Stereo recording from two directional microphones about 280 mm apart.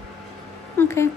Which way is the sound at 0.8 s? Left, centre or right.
Centre.